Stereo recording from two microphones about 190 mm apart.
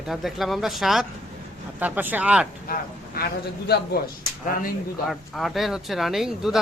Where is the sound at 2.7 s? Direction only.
55° left (ahead or behind).